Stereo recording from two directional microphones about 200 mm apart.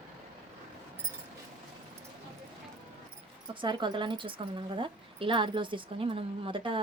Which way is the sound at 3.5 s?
25° right (ahead or behind).